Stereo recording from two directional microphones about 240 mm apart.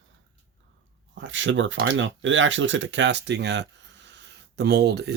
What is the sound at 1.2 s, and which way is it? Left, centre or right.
Speech, right.